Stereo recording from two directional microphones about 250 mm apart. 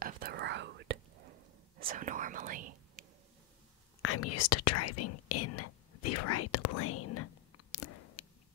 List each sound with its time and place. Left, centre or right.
0.0 s whispering: right
1.9 s whispering: right
4.0 s speech: left